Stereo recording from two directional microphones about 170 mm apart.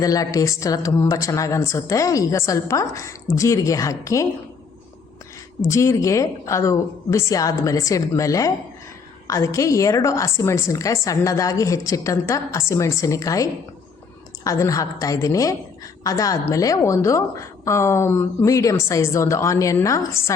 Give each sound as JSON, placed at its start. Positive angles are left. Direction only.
{"t": 0.0, "sound": "a woman's voice", "side_deg": 20}
{"t": 5.6, "sound": "a woman's voice", "side_deg": 15}